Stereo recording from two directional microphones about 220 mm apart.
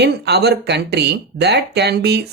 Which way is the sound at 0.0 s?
50° right (ahead or behind).